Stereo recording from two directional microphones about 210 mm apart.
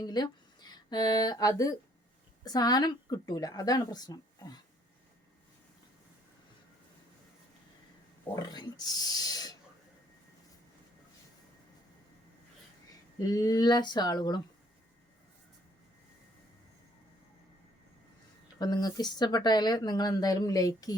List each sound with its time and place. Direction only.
0.0 s speech: 20° left (ahead or behind)
8.4 s speech: 20° left (ahead or behind)
13.1 s speech: 15° left (ahead or behind)
18.6 s speech: 20° left (ahead or behind)